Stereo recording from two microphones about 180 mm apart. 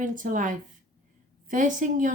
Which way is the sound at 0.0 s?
45° right (ahead or behind).